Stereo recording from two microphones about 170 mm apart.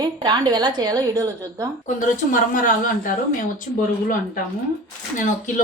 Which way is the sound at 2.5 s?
50° left (ahead or behind).